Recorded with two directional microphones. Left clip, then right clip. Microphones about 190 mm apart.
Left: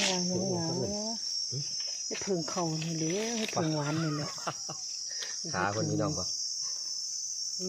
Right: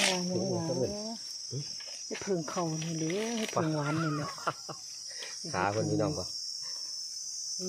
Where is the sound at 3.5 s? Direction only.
30° right (ahead or behind).